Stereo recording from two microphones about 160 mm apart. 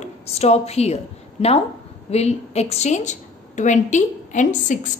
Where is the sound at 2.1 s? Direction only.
40° left (ahead or behind).